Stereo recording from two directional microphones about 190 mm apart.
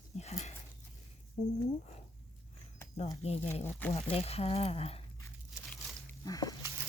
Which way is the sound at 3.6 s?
10° left (ahead or behind).